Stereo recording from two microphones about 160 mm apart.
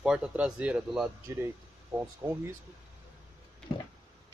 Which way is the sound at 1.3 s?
15° right (ahead or behind).